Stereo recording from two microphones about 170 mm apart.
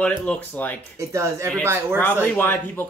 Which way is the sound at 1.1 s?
15° right (ahead or behind).